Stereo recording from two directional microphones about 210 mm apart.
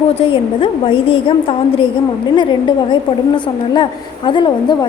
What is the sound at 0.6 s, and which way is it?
A woman's voice, 25° left (ahead or behind).